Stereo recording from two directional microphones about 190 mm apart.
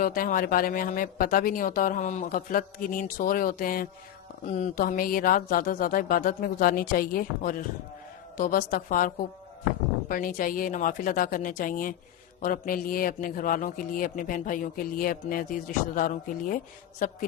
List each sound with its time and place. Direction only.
0.0 s a man's voice: 45° left (ahead or behind)